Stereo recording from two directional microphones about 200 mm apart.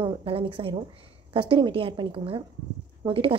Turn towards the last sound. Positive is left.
turn(degrees=-25)  # may be behind; listen again after turning